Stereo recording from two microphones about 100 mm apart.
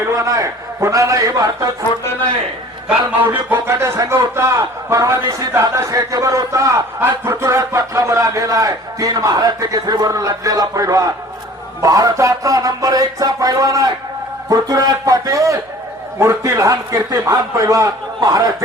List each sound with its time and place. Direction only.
0.0 s speech: 30° right (ahead or behind)
3.5 s a man's voice: 25° right (ahead or behind)